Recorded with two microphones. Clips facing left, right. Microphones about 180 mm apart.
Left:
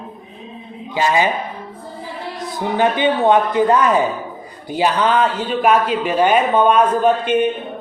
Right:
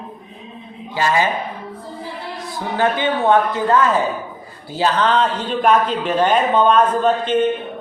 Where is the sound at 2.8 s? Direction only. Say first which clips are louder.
Left 2 dB; 20° left (ahead or behind).